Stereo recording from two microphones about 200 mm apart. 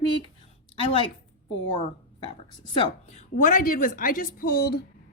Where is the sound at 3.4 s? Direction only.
40° left (ahead or behind).